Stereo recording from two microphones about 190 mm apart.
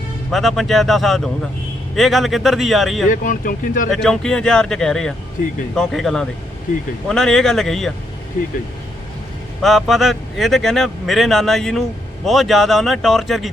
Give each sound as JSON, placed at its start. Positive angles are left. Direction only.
{"t": 0.3, "sound": "speech", "side_deg": 0}
{"t": 3.1, "sound": "speech", "side_deg": 45}
{"t": 3.9, "sound": "speech", "side_deg": 0}
{"t": 5.4, "sound": "speech", "side_deg": 50}
{"t": 5.7, "sound": "speech", "side_deg": 0}
{"t": 9.6, "sound": "speech", "side_deg": 0}